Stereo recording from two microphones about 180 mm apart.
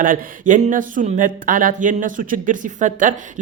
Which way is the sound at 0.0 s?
45° right (ahead or behind).